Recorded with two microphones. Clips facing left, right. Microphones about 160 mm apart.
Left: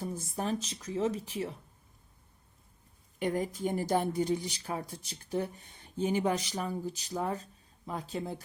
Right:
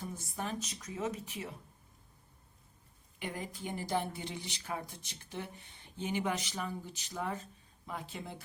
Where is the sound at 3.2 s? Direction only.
45° left (ahead or behind).